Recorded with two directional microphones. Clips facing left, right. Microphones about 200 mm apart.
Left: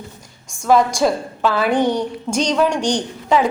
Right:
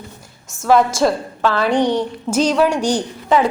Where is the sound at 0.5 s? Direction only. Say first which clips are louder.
Right 1 dB; 5° right (ahead or behind).